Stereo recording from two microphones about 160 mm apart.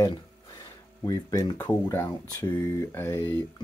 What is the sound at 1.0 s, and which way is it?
Speech, 20° left (ahead or behind).